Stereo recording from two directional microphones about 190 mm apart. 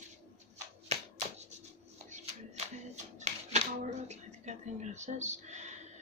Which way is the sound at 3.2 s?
35° right (ahead or behind).